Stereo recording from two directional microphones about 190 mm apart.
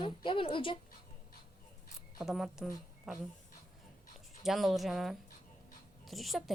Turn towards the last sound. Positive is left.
turn(degrees=0)  # may be behind; listen again after turning